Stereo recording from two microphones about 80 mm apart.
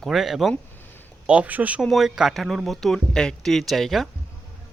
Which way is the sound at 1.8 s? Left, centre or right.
Centre.